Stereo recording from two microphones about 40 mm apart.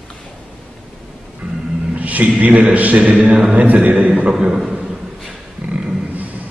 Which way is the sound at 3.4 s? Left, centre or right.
Right.